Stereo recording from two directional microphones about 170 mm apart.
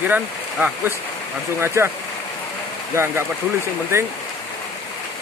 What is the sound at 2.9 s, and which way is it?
Speech, 15° right (ahead or behind).